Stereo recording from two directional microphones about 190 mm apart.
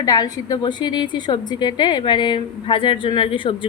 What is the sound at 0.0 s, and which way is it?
A woman's voice, 20° left (ahead or behind).